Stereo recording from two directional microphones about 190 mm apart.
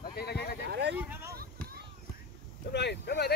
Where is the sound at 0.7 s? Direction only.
60° right (ahead or behind).